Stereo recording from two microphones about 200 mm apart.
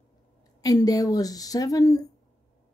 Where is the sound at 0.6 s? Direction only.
20° left (ahead or behind).